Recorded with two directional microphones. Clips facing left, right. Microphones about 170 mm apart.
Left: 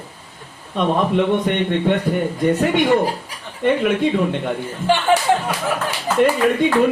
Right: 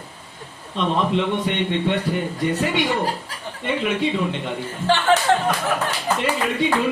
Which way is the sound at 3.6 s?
50° left (ahead or behind).